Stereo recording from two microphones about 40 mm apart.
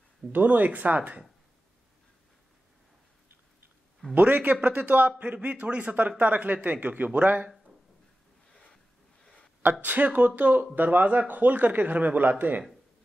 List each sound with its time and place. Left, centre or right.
0.3 s speech: right
4.1 s a man's voice: right
9.2 s a sound: centre
9.6 s speech: right